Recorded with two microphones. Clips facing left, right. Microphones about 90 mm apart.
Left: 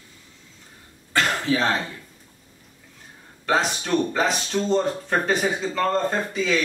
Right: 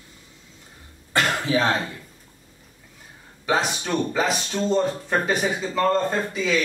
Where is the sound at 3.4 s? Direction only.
Centre (ahead or behind).